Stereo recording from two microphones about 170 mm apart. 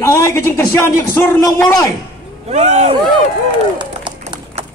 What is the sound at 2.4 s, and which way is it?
Speech, 40° right (ahead or behind).